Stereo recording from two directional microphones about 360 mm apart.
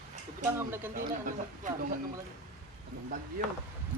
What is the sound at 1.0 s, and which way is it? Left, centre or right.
Speech, right.